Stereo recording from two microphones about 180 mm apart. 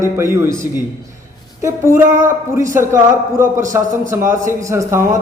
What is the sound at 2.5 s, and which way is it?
Speech, 15° right (ahead or behind).